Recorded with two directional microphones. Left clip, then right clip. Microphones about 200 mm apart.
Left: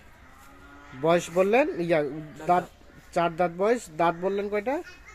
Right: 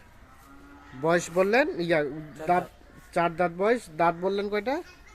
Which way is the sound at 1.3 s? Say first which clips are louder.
Even; 15° left (ahead or behind).